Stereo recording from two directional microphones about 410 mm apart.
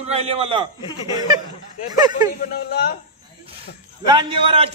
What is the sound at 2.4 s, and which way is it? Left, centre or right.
Speech, left.